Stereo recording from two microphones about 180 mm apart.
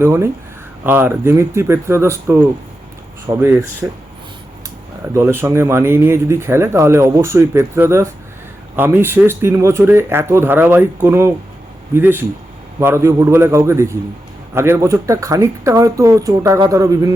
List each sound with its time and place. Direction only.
0.0 s speech: 15° right (ahead or behind)
5.0 s speech: 15° right (ahead or behind)